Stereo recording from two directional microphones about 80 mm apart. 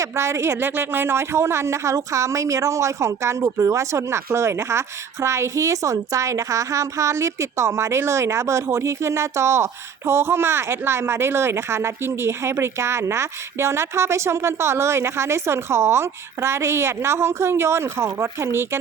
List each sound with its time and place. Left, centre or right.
0.0 s speech: right